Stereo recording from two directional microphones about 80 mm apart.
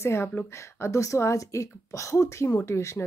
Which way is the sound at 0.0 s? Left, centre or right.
Left.